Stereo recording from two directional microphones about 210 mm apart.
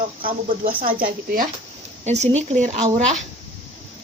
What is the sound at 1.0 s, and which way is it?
Speech, 40° right (ahead or behind).